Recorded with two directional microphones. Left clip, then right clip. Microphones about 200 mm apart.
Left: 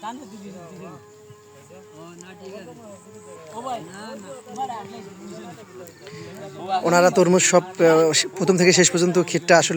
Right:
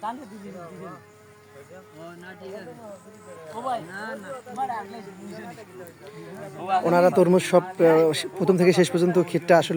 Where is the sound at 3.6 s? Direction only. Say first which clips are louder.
Right 2 dB; 45° left (ahead or behind).